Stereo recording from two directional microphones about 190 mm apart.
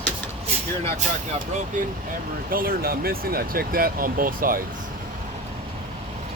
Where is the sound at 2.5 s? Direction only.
50° right (ahead or behind).